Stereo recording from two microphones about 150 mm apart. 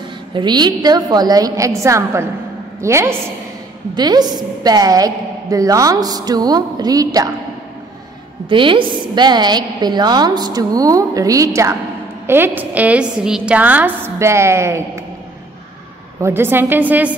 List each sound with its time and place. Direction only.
0.3 s a woman's voice: 30° right (ahead or behind)
8.5 s a woman's voice: 35° right (ahead or behind); by 14.8 s 15° right (ahead or behind)
16.2 s a woman's voice: 15° right (ahead or behind)